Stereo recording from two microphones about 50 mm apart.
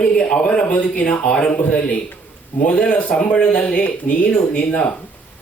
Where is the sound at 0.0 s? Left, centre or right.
Left.